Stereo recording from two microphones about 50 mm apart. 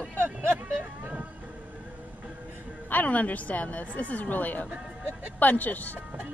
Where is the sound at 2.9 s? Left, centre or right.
Left.